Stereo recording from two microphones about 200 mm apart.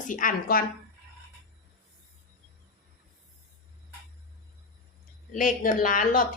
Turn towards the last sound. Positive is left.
turn(degrees=40)  # may be behind; listen again after turning